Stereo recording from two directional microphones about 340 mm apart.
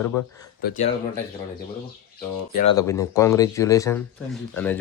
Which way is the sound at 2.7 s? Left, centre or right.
Centre.